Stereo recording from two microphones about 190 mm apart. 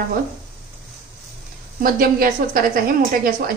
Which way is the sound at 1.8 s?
50° right (ahead or behind).